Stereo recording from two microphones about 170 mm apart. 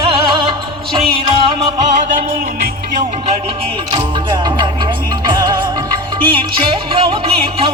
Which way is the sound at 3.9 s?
25° right (ahead or behind).